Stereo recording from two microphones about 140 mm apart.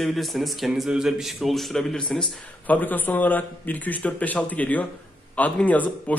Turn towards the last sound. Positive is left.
turn(degrees=10)  # may be behind; listen again after turning